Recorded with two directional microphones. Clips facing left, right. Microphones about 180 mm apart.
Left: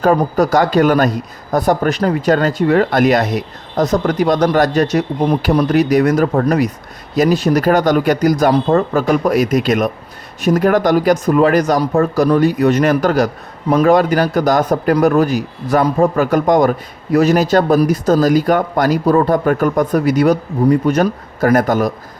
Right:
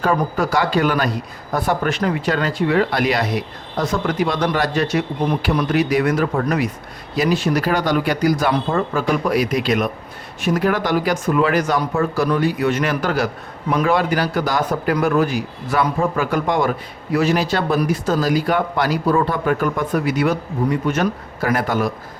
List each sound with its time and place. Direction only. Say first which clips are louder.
0.0 s speech: left 6 dB; 40° left (ahead or behind)